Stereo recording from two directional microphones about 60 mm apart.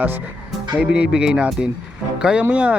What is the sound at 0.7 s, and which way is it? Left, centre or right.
A man's voice, centre.